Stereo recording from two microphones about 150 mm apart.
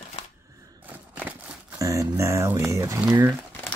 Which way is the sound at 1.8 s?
20° right (ahead or behind).